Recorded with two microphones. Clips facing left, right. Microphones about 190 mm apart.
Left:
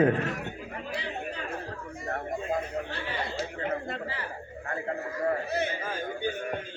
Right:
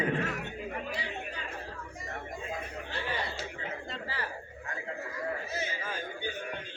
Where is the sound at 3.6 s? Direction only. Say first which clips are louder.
Left 8 dB; 55° left (ahead or behind).